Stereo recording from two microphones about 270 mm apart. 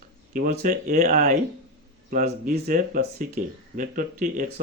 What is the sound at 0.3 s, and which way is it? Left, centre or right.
Speech, right.